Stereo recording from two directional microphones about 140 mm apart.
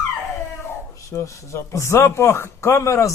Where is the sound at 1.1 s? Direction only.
20° left (ahead or behind).